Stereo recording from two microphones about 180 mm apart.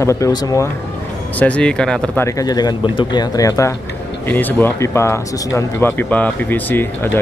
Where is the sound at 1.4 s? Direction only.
5° left (ahead or behind).